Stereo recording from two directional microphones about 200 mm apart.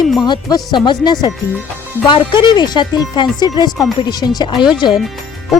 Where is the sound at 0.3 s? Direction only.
20° left (ahead or behind).